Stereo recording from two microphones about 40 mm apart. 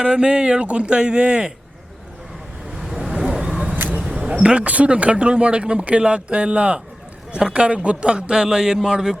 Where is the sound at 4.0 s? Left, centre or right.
Centre.